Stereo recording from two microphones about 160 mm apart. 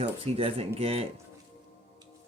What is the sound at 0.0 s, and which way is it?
Speech, 35° right (ahead or behind).